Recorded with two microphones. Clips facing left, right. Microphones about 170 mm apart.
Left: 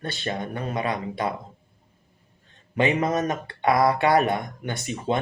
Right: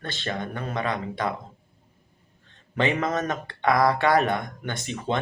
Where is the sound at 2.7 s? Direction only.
20° left (ahead or behind).